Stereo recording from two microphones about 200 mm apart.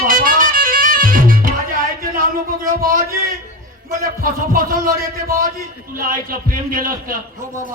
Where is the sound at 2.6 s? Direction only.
45° right (ahead or behind).